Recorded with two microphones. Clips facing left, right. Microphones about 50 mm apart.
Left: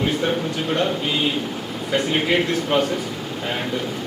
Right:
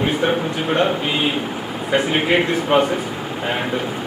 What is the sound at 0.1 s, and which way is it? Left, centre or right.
A man's voice, right.